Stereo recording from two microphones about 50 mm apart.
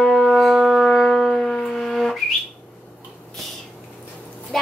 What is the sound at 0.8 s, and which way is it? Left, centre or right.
Wind instrument, centre.